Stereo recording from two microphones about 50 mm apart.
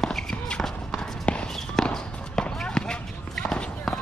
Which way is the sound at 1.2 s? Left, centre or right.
Left.